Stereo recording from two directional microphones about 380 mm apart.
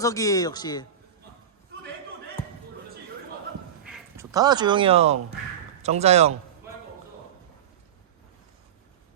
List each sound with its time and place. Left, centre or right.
0.0 s speech: centre
3.8 s speech: centre